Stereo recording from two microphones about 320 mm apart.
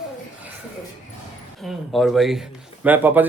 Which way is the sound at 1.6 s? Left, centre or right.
Centre.